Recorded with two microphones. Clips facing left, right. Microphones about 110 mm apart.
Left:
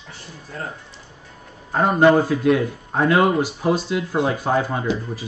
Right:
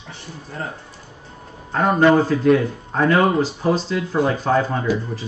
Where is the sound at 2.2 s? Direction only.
10° left (ahead or behind).